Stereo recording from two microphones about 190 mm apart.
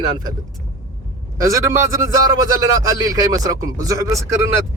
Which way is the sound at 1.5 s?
15° right (ahead or behind).